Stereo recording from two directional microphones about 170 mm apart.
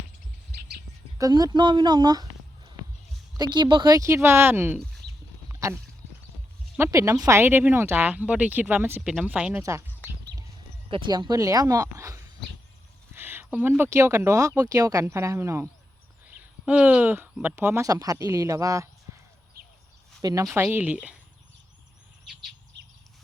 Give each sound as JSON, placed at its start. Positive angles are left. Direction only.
{"t": 1.2, "sound": "speech", "side_deg": -25}
{"t": 3.3, "sound": "speech", "side_deg": -25}
{"t": 5.5, "sound": "a sound", "side_deg": -20}
{"t": 6.7, "sound": "speech", "side_deg": -15}
{"t": 10.8, "sound": "speech", "side_deg": -30}
{"t": 20.2, "sound": "speech", "side_deg": -20}
{"t": 20.6, "sound": "speech", "side_deg": -10}
{"t": 22.8, "sound": "bird", "side_deg": -90}